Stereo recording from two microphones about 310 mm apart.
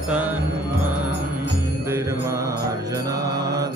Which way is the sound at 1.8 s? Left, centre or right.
Centre.